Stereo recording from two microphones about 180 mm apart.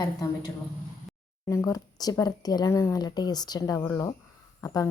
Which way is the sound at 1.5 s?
20° left (ahead or behind).